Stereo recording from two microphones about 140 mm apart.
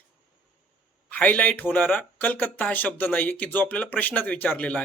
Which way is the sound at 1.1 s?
10° left (ahead or behind).